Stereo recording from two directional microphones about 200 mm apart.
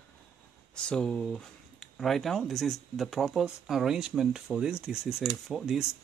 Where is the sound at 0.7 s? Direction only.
5° left (ahead or behind).